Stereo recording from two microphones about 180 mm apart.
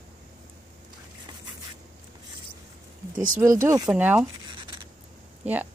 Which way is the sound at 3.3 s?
15° right (ahead or behind).